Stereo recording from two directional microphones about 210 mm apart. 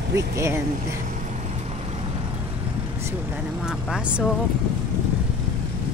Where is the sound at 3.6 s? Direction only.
5° right (ahead or behind).